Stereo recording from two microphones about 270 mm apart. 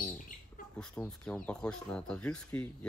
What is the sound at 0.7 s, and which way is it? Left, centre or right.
Speech, centre.